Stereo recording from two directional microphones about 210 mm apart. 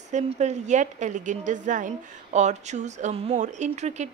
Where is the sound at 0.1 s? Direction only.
35° right (ahead or behind).